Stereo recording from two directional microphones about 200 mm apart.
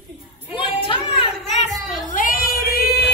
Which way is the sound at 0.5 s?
25° left (ahead or behind).